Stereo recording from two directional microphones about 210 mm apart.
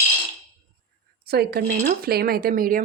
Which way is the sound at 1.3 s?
50° right (ahead or behind).